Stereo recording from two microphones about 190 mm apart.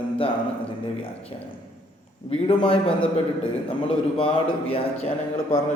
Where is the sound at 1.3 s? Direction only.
25° left (ahead or behind).